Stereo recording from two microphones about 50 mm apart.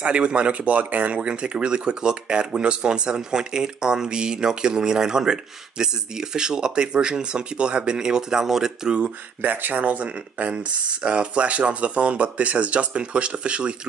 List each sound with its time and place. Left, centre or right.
0.0 s speech: right
9.4 s speech: right